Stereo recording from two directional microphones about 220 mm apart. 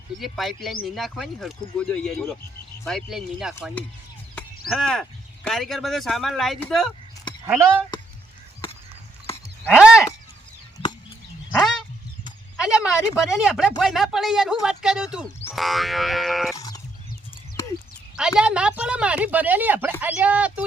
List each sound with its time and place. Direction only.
0.2 s speech: centre (ahead or behind)
7.4 s speech: 10° right (ahead or behind)
9.6 s a sound: centre (ahead or behind)
12.5 s speech: 5° right (ahead or behind)
16.6 s a sound: 15° left (ahead or behind)
18.2 s speech: 5° right (ahead or behind)